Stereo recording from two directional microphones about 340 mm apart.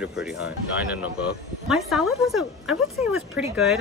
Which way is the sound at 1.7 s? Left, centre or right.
Centre.